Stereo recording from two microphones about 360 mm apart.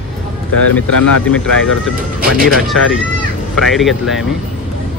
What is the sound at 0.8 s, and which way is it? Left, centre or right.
Speech, left.